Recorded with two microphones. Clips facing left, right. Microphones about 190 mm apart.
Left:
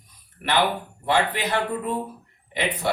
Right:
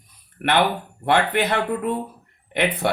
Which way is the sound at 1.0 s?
65° right (ahead or behind).